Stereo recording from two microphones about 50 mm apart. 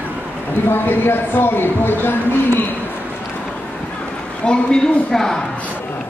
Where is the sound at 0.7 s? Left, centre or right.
Left.